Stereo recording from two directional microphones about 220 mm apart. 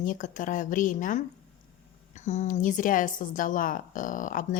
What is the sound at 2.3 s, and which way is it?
A woman's voice, 30° left (ahead or behind).